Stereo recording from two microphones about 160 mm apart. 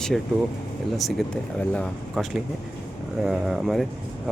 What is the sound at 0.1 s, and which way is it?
Speech, 5° left (ahead or behind).